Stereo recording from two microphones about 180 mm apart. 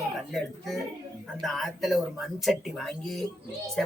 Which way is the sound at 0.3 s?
Centre (ahead or behind).